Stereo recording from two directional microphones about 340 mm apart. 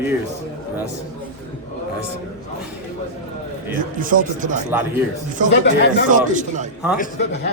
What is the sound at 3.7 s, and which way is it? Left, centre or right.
Speech, right.